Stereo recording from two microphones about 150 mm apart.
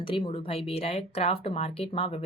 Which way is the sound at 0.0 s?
35° left (ahead or behind).